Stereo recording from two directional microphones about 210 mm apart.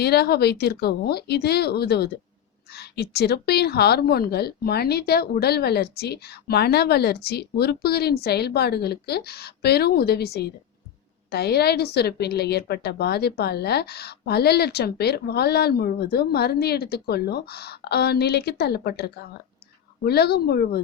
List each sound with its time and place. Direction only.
0.0 s a woman's voice: 50° left (ahead or behind)